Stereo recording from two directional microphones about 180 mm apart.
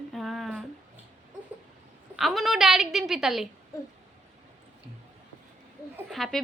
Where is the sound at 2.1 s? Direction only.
Centre (ahead or behind).